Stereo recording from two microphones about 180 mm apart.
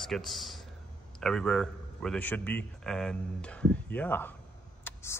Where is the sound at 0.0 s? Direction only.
Centre (ahead or behind).